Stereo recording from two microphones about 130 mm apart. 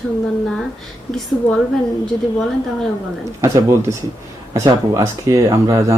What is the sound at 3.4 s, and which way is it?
Speech, 25° right (ahead or behind).